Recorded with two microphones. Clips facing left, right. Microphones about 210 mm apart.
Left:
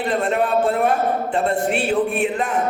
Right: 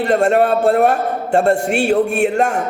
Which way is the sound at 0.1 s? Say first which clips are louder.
Right 7 dB; 45° right (ahead or behind).